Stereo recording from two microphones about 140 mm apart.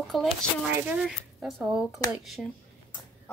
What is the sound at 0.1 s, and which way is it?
Speech, centre (ahead or behind).